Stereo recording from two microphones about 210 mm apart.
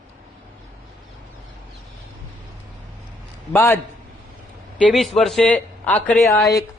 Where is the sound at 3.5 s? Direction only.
15° left (ahead or behind).